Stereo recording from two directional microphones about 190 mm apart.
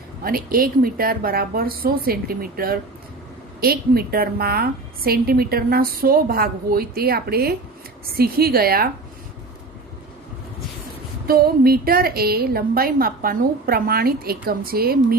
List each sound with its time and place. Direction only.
0.2 s a woman's voice: 50° right (ahead or behind)
11.3 s a woman's voice: 50° right (ahead or behind)